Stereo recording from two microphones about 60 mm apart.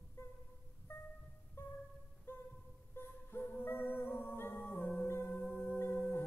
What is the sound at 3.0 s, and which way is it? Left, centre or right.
Singing, left.